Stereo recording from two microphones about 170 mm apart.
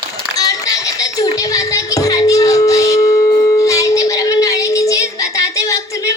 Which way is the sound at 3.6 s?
20° left (ahead or behind).